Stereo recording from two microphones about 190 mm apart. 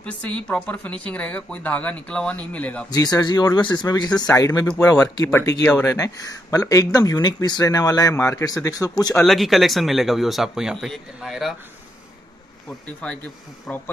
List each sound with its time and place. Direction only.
0.0 s speech: 5° left (ahead or behind)
2.9 s speech: 20° left (ahead or behind)
4.9 s speech: 15° left (ahead or behind)
9.2 s speech: centre (ahead or behind)
12.8 s speech: 5° left (ahead or behind)